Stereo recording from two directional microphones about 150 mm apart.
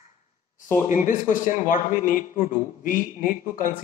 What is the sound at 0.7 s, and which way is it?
A man's voice, 55° left (ahead or behind).